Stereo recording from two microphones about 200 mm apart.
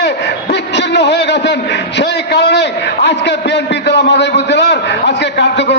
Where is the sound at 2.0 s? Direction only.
60° left (ahead or behind).